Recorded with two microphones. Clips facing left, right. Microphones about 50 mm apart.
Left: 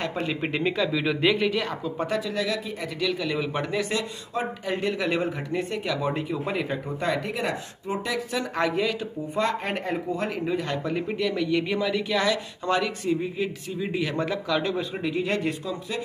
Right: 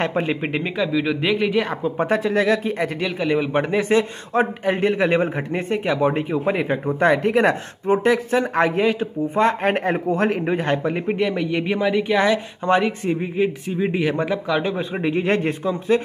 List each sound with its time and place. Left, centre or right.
0.0 s speech: right; by 1.5 s centre
1.5 s speech: right
1.8 s a man's voice: right
3.1 s a man's voice: right
7.0 s a man's voice: right
10.8 s a man's voice: right